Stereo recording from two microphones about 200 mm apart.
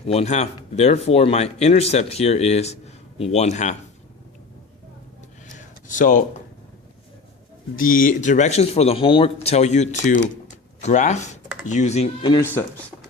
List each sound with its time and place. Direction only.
0.1 s speech: 30° left (ahead or behind)
5.5 s a sound: 40° left (ahead or behind)
7.8 s speech: 45° left (ahead or behind); by 12.4 s 30° left (ahead or behind)
12.4 s speech: 10° left (ahead or behind)